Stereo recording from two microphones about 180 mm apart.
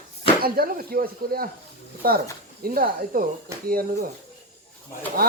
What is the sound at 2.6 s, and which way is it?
Speech, 55° right (ahead or behind).